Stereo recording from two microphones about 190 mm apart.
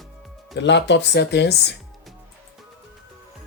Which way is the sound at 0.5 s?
70° left (ahead or behind).